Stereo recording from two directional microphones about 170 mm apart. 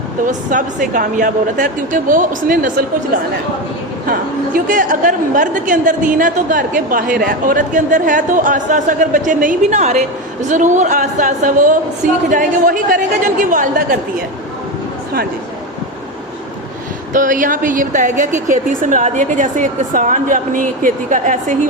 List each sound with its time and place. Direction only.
0.3 s a woman's voice: 50° right (ahead or behind)
4.5 s a woman's voice: 50° right (ahead or behind)
17.2 s a woman's voice: 50° right (ahead or behind)